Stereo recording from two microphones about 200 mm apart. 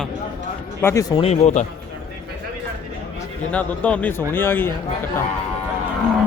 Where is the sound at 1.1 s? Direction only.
30° left (ahead or behind).